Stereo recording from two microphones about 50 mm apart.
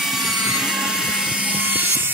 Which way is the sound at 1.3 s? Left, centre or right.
Right.